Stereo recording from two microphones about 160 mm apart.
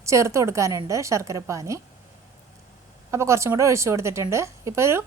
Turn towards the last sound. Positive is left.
turn(degrees=-15)  # may be behind; listen again after turning